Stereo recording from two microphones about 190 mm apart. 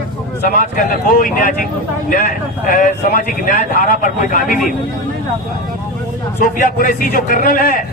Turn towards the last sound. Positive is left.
turn(degrees=50)  # may be behind; listen again after turning